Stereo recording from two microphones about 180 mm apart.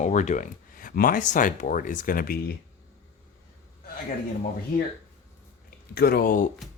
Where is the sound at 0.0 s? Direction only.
40° left (ahead or behind).